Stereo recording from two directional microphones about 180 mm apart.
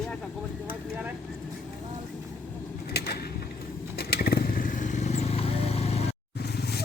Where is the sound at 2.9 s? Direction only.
60° left (ahead or behind).